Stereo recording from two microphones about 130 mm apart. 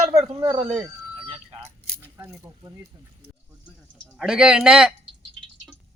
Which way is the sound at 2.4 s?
25° right (ahead or behind).